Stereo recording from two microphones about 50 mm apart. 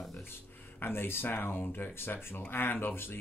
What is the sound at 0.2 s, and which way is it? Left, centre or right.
Speech, left.